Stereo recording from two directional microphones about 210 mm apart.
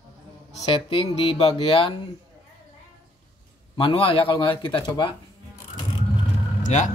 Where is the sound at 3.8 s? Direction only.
25° left (ahead or behind).